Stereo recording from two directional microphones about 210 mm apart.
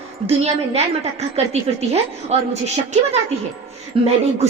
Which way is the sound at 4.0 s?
25° right (ahead or behind).